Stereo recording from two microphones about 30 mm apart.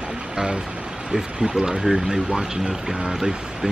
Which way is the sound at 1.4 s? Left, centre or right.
Right.